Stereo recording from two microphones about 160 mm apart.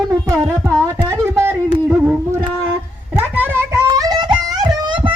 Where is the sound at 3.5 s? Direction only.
15° right (ahead or behind).